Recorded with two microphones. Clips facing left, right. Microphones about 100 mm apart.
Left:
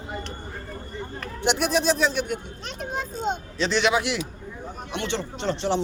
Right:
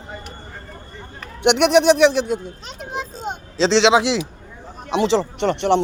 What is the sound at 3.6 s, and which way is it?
Speech, 90° right.